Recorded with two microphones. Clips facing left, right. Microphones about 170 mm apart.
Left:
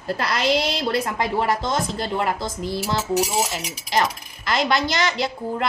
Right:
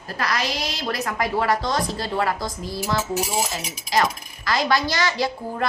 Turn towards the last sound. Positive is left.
turn(degrees=20)  # may be behind; listen again after turning